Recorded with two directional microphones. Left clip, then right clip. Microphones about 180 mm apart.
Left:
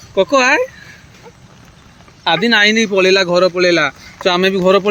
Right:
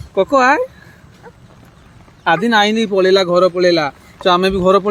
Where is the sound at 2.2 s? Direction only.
10° right (ahead or behind).